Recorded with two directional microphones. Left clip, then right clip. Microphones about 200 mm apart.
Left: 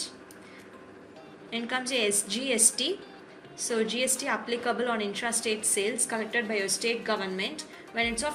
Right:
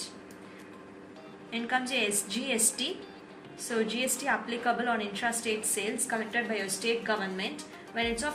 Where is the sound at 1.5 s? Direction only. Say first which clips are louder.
Even; 55° left (ahead or behind).